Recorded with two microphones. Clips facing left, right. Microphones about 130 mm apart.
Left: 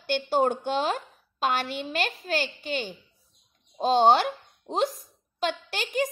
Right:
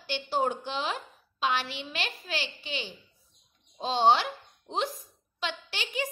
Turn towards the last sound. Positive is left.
turn(degrees=45)  # may be behind; listen again after turning